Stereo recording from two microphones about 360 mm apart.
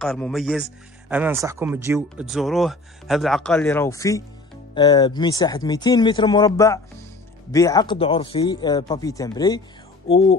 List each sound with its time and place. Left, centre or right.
0.0 s speech: centre